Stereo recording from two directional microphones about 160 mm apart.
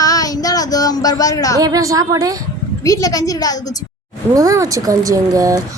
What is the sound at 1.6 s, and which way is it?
Speech, 20° right (ahead or behind).